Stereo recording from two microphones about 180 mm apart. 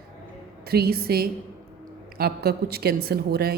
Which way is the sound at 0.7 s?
60° right (ahead or behind).